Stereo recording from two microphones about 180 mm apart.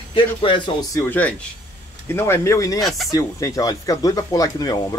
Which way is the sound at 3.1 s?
20° left (ahead or behind).